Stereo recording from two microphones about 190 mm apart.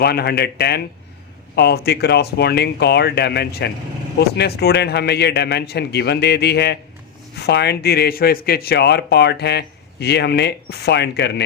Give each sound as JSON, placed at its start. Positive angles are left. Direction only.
{"t": 0.0, "sound": "speech", "side_deg": 55}